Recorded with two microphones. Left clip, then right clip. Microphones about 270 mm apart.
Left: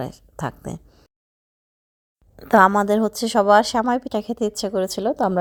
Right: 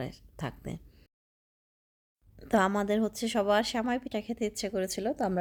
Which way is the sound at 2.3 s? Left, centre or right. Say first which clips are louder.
Left 13 dB; centre.